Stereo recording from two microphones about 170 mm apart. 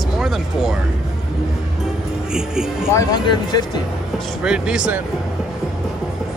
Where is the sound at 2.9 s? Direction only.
20° left (ahead or behind).